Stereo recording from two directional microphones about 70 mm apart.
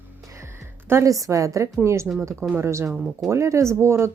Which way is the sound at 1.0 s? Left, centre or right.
Right.